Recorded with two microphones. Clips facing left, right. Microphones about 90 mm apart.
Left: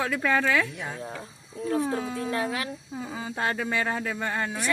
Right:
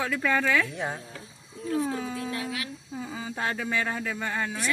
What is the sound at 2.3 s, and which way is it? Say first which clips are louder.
Speech: left 5 dB; 40° left (ahead or behind).